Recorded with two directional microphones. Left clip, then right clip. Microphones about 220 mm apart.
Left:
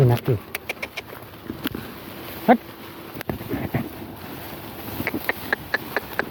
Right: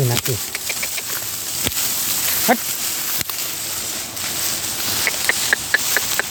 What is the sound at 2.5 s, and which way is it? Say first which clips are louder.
Speech: left 1 dB; 30° left (ahead or behind).